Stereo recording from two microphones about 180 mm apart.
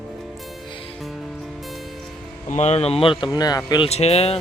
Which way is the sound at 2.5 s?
40° left (ahead or behind).